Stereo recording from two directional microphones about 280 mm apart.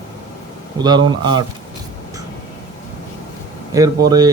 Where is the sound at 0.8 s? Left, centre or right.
Centre.